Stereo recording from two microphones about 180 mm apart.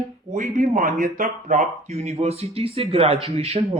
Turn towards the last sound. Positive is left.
turn(degrees=-35)  # may be behind; listen again after turning